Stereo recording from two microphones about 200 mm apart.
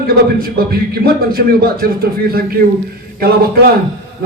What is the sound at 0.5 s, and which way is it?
A man's voice, 50° right (ahead or behind).